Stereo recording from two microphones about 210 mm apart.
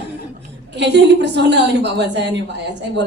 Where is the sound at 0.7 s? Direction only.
55° right (ahead or behind).